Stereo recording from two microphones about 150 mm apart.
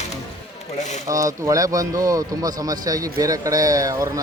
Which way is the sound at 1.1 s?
20° right (ahead or behind).